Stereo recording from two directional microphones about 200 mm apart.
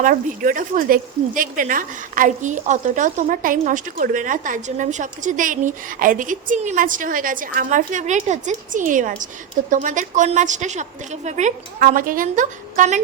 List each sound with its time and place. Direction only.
0.0 s speech: 40° right (ahead or behind)